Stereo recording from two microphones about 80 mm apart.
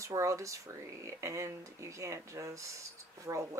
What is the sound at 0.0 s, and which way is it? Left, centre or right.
Speech, right.